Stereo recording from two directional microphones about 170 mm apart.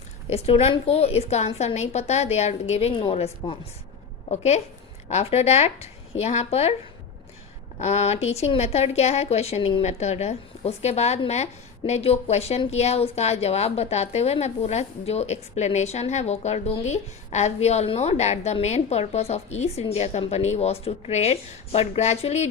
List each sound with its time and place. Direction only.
0.3 s a woman's voice: 35° left (ahead or behind)
7.8 s a woman's voice: 40° left (ahead or behind)